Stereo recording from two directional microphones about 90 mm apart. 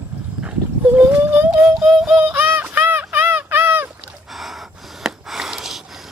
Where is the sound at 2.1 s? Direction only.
20° right (ahead or behind).